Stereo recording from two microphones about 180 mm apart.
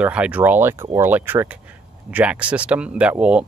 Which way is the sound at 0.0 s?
5° right (ahead or behind).